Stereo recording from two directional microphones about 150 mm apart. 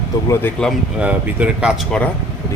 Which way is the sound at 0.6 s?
5° right (ahead or behind).